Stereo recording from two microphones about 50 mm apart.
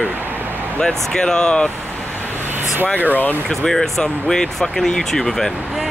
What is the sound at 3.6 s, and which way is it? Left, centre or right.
Speech, centre.